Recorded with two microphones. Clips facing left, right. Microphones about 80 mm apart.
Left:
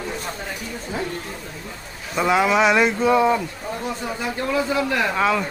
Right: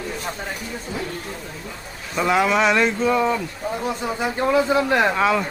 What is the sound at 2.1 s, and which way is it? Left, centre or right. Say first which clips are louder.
Speech: left 1 dB; centre.